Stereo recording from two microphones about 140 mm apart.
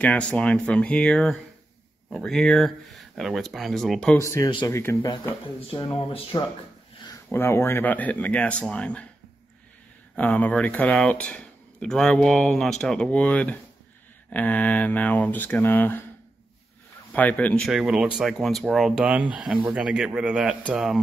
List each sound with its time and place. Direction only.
0.0 s speech: 10° left (ahead or behind)
4.2 s speech: 20° left (ahead or behind)
4.5 s speech: 35° left (ahead or behind)
4.7 s speech: 20° left (ahead or behind)
5.9 s speech: 40° left (ahead or behind)
7.2 s speech: 15° left (ahead or behind)
10.1 s speech: 10° left (ahead or behind)
17.1 s speech: 10° left (ahead or behind)
17.6 s a man's voice: 5° right (ahead or behind)